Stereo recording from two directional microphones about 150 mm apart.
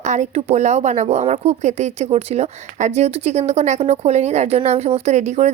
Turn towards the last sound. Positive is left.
turn(degrees=-50)  # may be behind; listen again after turning